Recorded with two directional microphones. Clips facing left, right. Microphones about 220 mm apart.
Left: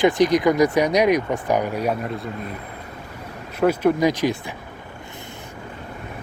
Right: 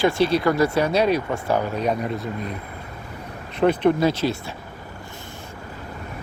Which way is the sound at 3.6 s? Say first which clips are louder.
Even; 5° left (ahead or behind).